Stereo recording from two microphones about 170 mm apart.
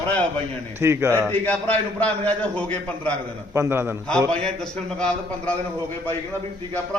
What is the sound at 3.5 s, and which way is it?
Speech, 15° right (ahead or behind).